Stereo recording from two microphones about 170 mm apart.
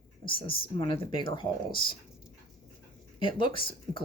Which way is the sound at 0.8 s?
30° left (ahead or behind).